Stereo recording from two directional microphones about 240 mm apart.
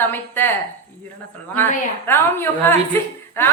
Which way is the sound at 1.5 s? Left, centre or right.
Centre.